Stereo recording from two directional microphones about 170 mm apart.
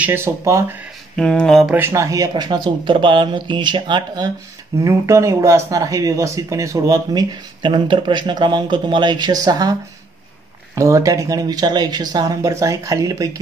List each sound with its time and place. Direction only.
0.0 s speech: 15° right (ahead or behind)
1.1 s speech: 5° left (ahead or behind)
1.8 s speech: 15° right (ahead or behind)